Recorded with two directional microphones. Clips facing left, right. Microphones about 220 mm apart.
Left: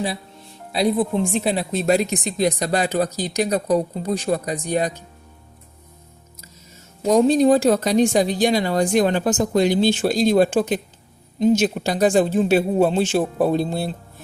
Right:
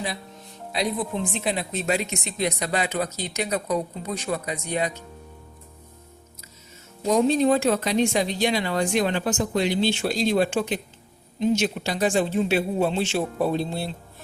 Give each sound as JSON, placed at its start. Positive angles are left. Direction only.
{"t": 0.7, "sound": "a woman's voice", "side_deg": 30}
{"t": 7.1, "sound": "a woman's voice", "side_deg": 45}